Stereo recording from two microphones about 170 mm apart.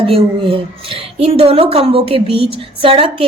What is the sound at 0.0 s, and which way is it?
A woman's voice, 35° right (ahead or behind).